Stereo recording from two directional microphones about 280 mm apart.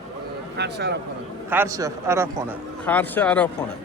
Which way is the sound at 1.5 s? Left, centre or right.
Centre.